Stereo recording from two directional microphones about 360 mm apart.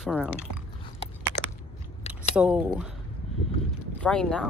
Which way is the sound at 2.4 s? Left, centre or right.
Centre.